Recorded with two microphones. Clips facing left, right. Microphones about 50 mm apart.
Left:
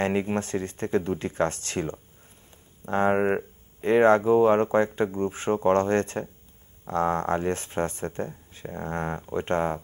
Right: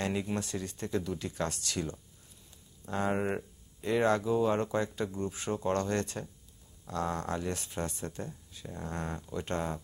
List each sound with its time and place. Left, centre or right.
0.0 s speech: left